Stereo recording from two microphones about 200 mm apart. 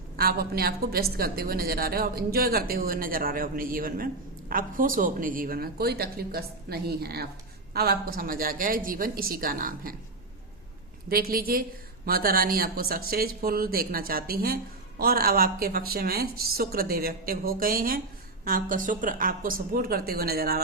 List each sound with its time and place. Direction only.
0.2 s a woman's voice: 50° right (ahead or behind)
11.1 s a woman's voice: 45° right (ahead or behind)